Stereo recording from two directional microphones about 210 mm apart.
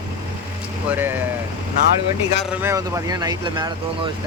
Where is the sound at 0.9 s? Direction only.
10° right (ahead or behind).